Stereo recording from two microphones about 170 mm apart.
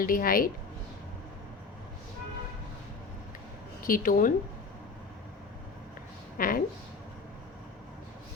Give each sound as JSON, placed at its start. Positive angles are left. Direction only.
{"t": 0.0, "sound": "speech", "side_deg": 55}
{"t": 3.8, "sound": "speech", "side_deg": 55}
{"t": 6.3, "sound": "a woman's voice", "side_deg": 55}